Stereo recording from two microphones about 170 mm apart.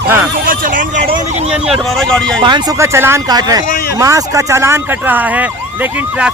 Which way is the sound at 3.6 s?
60° left (ahead or behind).